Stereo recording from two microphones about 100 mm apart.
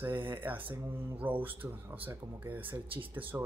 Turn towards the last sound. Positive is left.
turn(degrees=-20)  # may be behind; listen again after turning